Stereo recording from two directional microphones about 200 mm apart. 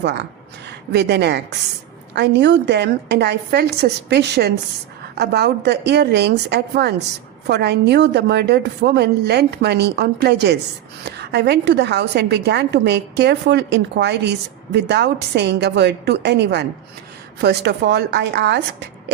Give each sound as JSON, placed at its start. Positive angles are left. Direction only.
{"t": 0.0, "sound": "a woman's voice", "side_deg": -60}